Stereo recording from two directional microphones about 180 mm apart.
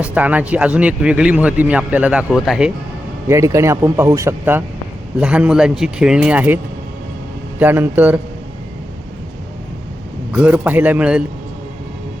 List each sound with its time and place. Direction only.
0.0 s a man's voice: 10° right (ahead or behind)
3.2 s a man's voice: 15° right (ahead or behind)
7.6 s a man's voice: 10° right (ahead or behind)
10.3 s a man's voice: 10° right (ahead or behind)